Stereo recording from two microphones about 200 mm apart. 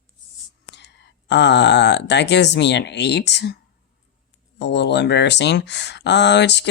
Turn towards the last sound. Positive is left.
turn(degrees=60)  # may be behind; listen again after turning